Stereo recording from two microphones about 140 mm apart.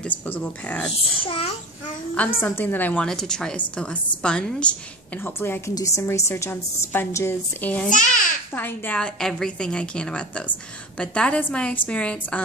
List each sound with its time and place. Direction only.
0.0 s a woman's voice: 10° left (ahead or behind)
1.2 s a child's voice: 40° left (ahead or behind)
2.4 s a woman's voice: 15° left (ahead or behind)
7.9 s a child's voice: 65° left (ahead or behind)
8.5 s a woman's voice: 15° left (ahead or behind)